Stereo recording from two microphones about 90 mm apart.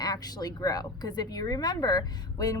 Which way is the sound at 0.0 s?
45° left (ahead or behind).